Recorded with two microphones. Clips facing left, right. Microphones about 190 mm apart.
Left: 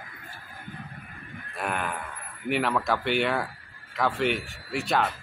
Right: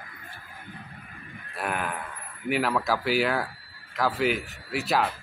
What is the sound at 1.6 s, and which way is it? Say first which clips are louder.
Speech: even; centre (ahead or behind).